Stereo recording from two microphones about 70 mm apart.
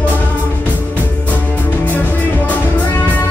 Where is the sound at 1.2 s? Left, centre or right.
Left.